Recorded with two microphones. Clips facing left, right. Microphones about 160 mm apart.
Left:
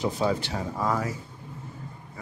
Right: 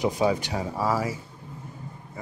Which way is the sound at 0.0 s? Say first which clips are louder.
Right 2 dB; 15° right (ahead or behind).